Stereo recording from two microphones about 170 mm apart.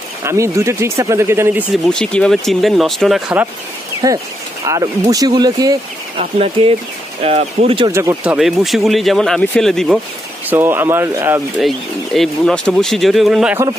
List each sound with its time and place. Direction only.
0.2 s speech: 15° right (ahead or behind)
1.9 s speech: 5° left (ahead or behind)
4.0 s speech: 20° right (ahead or behind)
6.3 s speech: 35° right (ahead or behind)
7.9 s speech: 15° right (ahead or behind); by 9.9 s centre (ahead or behind)
10.5 s speech: 10° right (ahead or behind)
11.6 s speech: centre (ahead or behind)